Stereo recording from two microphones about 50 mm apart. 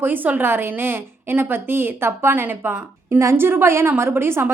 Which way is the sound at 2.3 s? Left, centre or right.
Right.